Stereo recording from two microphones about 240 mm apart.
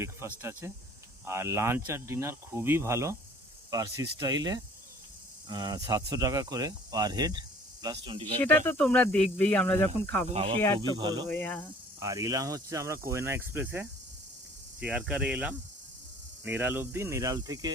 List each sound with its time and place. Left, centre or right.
0.0 s speech: centre
8.6 s speech: centre
10.2 s speech: right
11.3 s speech: centre
11.9 s speech: centre